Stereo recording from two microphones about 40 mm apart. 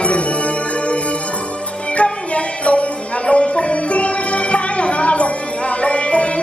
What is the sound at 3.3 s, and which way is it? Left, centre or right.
Music, left.